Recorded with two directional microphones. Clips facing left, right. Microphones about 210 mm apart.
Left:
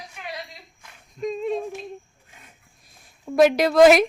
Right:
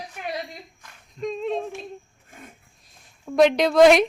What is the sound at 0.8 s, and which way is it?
Female singing, 5° left (ahead or behind).